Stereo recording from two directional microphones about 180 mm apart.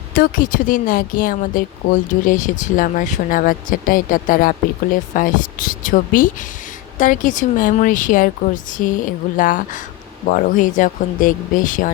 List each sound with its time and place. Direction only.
0.1 s speech: 50° left (ahead or behind)